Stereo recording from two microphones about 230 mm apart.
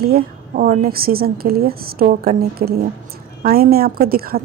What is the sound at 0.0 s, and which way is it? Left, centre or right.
A woman's voice, right.